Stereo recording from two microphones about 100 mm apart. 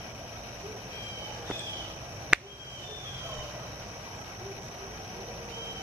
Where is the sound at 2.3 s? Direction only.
10° right (ahead or behind).